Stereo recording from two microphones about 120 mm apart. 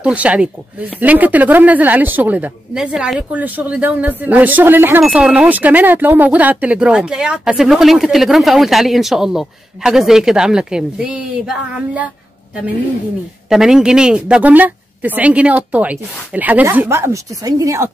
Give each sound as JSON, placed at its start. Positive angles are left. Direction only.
{"t": 0.0, "sound": "speech", "side_deg": -10}
{"t": 13.5, "sound": "speech", "side_deg": -5}